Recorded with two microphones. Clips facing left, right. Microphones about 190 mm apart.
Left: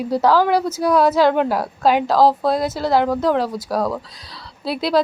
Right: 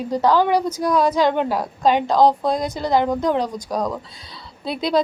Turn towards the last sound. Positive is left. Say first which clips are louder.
# left 2 dB
turn(degrees=5)  # may be behind; listen again after turning